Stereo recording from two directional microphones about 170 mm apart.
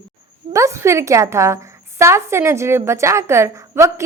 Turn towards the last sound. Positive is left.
turn(degrees=-15)  # may be behind; listen again after turning